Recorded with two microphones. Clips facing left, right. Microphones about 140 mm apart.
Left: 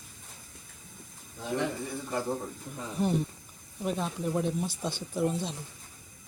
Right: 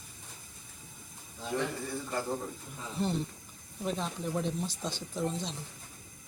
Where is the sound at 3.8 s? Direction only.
10° left (ahead or behind).